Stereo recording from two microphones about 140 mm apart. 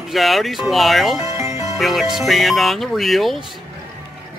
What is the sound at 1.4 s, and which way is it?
Music, 20° right (ahead or behind).